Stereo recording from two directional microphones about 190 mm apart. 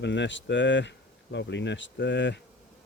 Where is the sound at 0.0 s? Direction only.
70° left (ahead or behind).